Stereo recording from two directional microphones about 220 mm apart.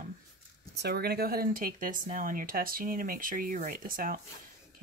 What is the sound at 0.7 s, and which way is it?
Speech, 45° right (ahead or behind).